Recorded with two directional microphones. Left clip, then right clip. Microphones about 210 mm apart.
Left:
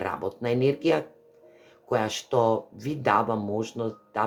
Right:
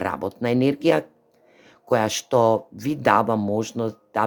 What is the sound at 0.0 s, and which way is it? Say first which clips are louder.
Speech: right 4 dB; 50° right (ahead or behind).